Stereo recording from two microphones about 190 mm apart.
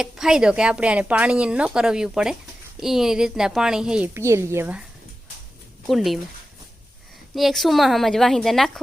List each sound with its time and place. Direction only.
0.0 s speech: 5° right (ahead or behind)
5.9 s speech: centre (ahead or behind)
7.3 s speech: centre (ahead or behind)